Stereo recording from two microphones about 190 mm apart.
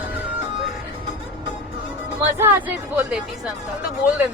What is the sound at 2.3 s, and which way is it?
Speech, 10° right (ahead or behind).